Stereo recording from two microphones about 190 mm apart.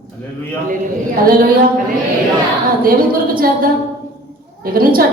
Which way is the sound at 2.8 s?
50° right (ahead or behind).